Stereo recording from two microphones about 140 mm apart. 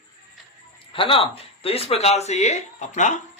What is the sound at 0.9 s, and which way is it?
Speech, 40° left (ahead or behind).